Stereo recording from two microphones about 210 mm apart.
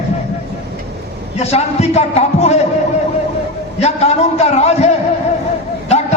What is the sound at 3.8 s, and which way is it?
A man's voice, 30° left (ahead or behind).